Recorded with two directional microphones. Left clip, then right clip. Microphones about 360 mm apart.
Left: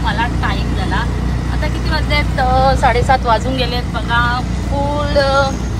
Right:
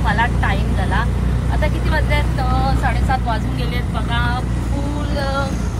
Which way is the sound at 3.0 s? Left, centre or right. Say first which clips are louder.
Left 8 dB; left.